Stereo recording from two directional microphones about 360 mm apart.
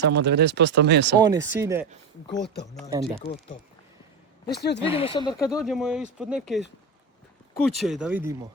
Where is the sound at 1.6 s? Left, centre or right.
Centre.